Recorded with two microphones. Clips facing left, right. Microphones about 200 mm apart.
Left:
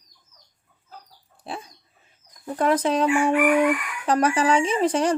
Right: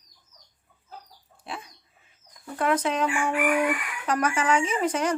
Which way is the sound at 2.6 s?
35° left (ahead or behind).